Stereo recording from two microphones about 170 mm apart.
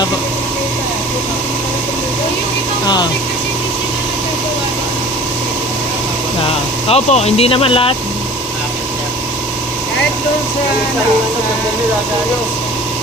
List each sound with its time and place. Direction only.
2.8 s speech: 25° left (ahead or behind)
6.8 s speech: 40° left (ahead or behind)